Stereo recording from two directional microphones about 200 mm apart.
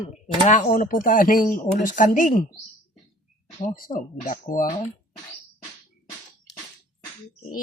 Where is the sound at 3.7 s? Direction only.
40° left (ahead or behind).